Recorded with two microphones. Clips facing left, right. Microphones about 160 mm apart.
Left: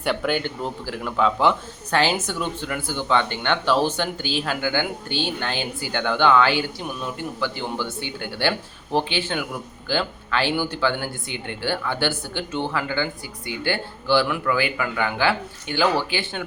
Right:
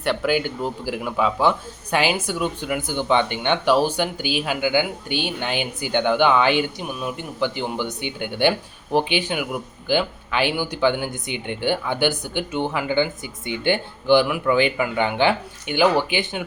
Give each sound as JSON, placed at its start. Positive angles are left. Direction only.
{"t": 0.0, "sound": "a man's voice", "side_deg": 0}